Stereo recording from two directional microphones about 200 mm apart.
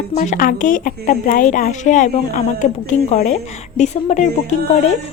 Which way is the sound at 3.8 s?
35° left (ahead or behind).